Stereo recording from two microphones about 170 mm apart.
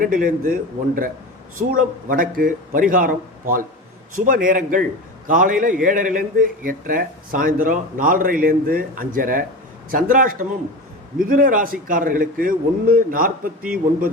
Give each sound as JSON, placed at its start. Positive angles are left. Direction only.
{"t": 0.0, "sound": "a man's voice", "side_deg": -55}